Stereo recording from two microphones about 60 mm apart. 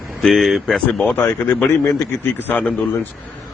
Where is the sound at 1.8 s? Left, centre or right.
Left.